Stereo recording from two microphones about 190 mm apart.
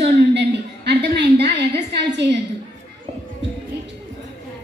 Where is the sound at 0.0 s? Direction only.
60° right (ahead or behind).